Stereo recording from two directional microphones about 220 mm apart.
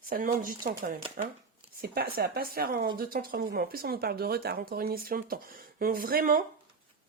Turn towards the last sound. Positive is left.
turn(degrees=-40)  # may be behind; listen again after turning